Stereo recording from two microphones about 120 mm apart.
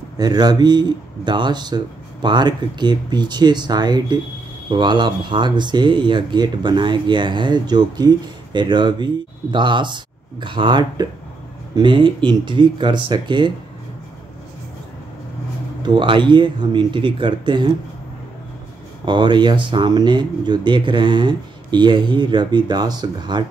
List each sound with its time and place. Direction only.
0.2 s speech: 35° right (ahead or behind)
15.8 s speech: 40° right (ahead or behind)
19.0 s speech: 40° right (ahead or behind)